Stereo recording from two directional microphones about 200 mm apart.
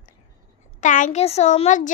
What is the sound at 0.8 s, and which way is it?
A child's voice, 40° left (ahead or behind).